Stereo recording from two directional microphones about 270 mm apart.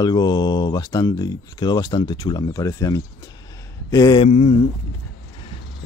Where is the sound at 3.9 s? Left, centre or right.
Centre.